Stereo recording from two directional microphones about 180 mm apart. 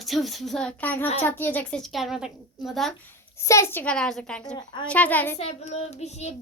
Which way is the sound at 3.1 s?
15° left (ahead or behind).